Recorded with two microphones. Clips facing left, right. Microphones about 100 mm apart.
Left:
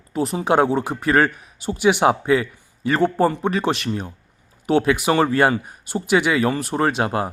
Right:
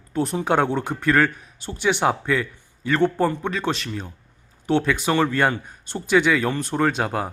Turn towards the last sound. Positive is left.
turn(degrees=5)  # may be behind; listen again after turning